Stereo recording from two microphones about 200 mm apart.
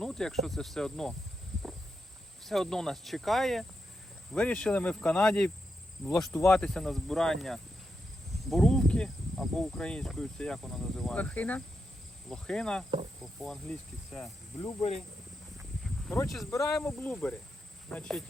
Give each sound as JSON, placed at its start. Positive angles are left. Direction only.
{"t": 0.0, "sound": "speech", "side_deg": 0}
{"t": 2.4, "sound": "speech", "side_deg": 0}
{"t": 14.6, "sound": "speech", "side_deg": 30}
{"t": 16.0, "sound": "speech", "side_deg": 15}